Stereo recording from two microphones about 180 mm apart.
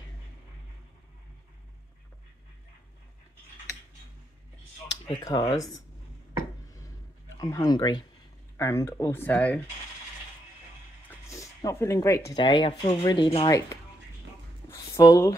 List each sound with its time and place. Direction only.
5.2 s speech: 30° left (ahead or behind)
7.3 s speech: 20° left (ahead or behind)
11.1 s a sound: 15° left (ahead or behind)
12.3 s speech: 25° left (ahead or behind)
13.5 s speech: 20° left (ahead or behind)
14.7 s a sound: 20° left (ahead or behind)